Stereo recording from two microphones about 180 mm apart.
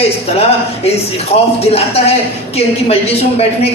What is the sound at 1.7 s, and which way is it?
A man's voice, 35° left (ahead or behind).